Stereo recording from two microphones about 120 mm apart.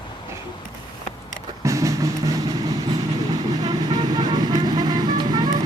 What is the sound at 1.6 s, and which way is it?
Vehicle, 25° right (ahead or behind).